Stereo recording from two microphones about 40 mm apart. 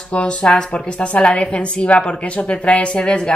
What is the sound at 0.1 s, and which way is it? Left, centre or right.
A woman's voice, left.